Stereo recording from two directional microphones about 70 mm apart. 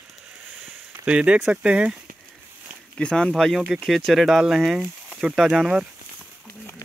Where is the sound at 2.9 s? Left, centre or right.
Centre.